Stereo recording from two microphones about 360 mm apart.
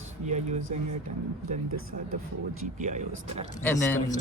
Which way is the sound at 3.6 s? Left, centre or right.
Centre.